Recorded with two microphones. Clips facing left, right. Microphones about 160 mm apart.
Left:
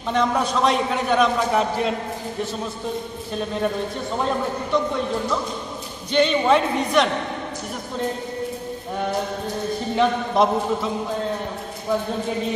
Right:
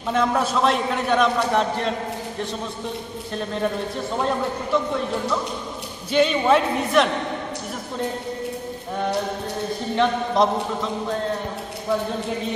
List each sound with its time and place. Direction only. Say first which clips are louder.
0.1 s a man's voice: even; 5° right (ahead or behind)
4.7 s a man's voice: left 1 dB; 5° right (ahead or behind)
6.1 s a man's voice: even; 5° right (ahead or behind)
9.9 s a man's voice: even; 5° left (ahead or behind)